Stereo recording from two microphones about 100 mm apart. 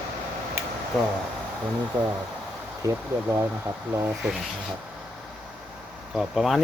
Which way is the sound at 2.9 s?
25° right (ahead or behind).